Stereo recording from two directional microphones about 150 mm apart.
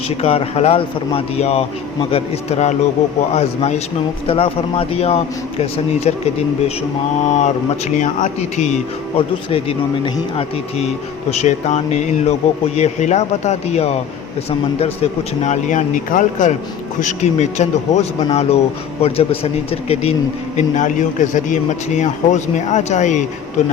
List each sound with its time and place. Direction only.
0.2 s a man's voice: 40° left (ahead or behind)
7.3 s a man's voice: 50° left (ahead or behind)
9.1 s a man's voice: 40° left (ahead or behind)
20.6 s a man's voice: 55° left (ahead or behind)